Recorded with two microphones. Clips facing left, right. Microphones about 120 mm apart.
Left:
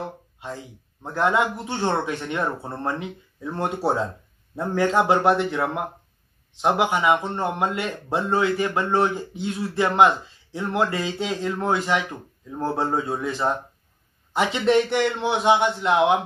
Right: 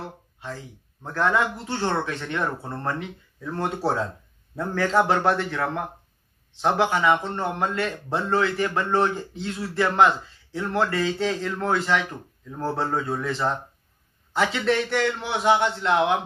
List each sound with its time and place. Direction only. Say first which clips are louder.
0.0 s a man's voice: left 3 dB; 20° left (ahead or behind)